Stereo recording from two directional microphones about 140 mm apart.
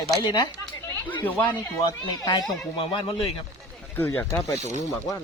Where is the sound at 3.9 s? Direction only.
15° left (ahead or behind).